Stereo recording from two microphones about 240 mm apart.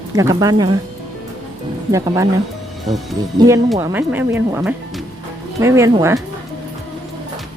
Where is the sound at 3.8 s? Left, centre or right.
Centre.